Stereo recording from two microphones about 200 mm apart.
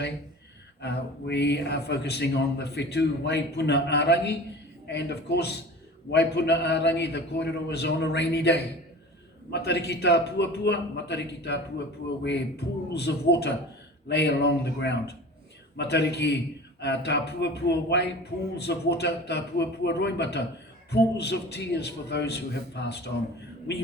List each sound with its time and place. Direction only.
0.8 s a man's voice: 60° left (ahead or behind)